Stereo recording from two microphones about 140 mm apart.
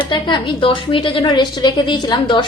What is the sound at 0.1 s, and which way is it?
A woman's voice, 35° left (ahead or behind).